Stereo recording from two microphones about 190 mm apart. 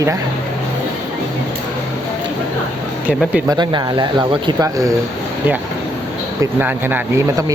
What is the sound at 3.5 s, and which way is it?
Speech, 25° right (ahead or behind).